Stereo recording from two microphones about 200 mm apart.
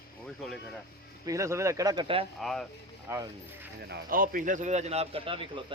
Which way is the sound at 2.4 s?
Centre (ahead or behind).